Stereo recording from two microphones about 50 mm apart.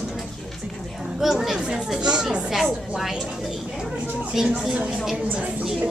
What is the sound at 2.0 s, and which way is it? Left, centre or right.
Speech, centre.